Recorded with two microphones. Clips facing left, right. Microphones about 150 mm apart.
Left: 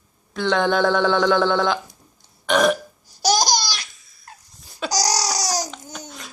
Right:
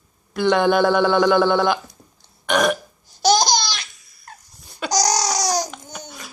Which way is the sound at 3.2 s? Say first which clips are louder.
Right 3 dB; 40° left (ahead or behind).